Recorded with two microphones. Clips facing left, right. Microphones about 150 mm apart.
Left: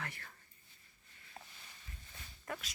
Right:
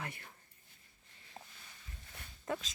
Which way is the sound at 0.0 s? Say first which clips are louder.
Right 2 dB; 20° right (ahead or behind).